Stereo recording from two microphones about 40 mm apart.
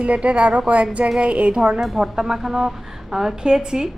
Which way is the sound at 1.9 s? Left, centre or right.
Centre.